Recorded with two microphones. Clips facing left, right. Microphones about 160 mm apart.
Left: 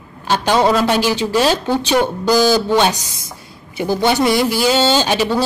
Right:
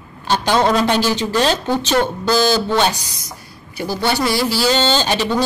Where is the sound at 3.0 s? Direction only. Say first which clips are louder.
Even; 25° left (ahead or behind).